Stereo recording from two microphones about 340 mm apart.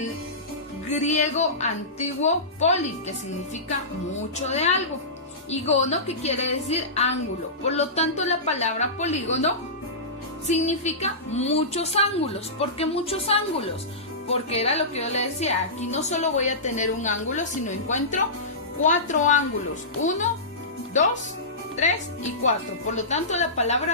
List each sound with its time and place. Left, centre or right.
0.9 s a woman's voice: centre
4.4 s a woman's voice: centre
21.8 s a woman's voice: left